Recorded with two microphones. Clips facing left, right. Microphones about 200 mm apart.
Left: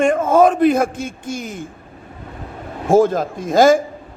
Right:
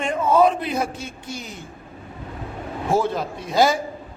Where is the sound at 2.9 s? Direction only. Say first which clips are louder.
Left 8 dB; 45° left (ahead or behind).